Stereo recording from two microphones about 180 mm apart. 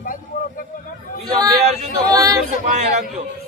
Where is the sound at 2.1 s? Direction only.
20° right (ahead or behind).